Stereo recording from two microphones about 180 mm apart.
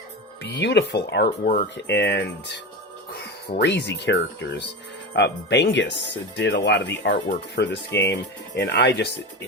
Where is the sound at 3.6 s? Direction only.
75° left (ahead or behind).